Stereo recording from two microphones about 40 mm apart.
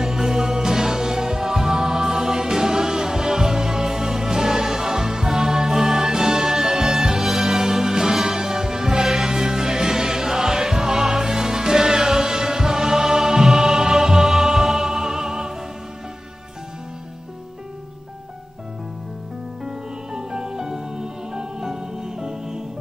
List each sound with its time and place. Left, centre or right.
0.0 s music: centre
19.6 s music: centre